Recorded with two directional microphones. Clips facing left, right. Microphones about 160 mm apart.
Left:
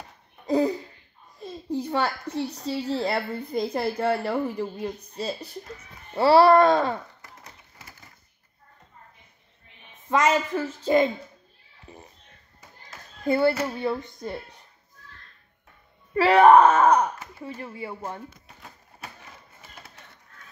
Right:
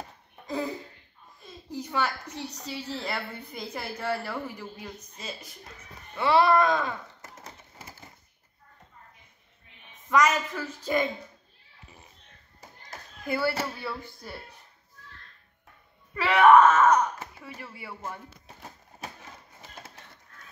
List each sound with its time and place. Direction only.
1.4 s a woman's voice: 30° left (ahead or behind)
10.0 s a woman's voice: 25° left (ahead or behind)
13.2 s a woman's voice: 25° left (ahead or behind)
16.2 s a woman's voice: 35° left (ahead or behind)